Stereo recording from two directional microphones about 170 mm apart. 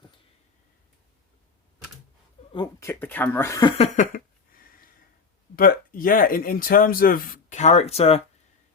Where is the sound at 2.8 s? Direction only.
15° left (ahead or behind).